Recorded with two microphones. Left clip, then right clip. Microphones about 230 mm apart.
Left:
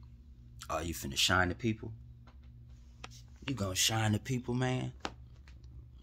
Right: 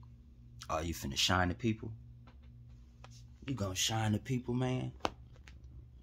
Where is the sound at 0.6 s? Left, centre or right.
Centre.